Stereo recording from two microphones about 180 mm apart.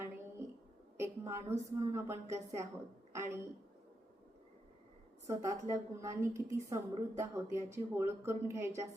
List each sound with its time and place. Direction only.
0.9 s a woman's voice: 15° right (ahead or behind)
5.2 s a woman's voice: 15° right (ahead or behind)